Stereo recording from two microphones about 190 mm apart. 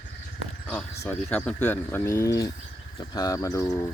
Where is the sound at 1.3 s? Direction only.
5° left (ahead or behind).